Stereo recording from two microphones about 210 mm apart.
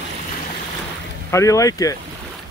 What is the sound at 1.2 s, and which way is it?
Speech, 15° left (ahead or behind).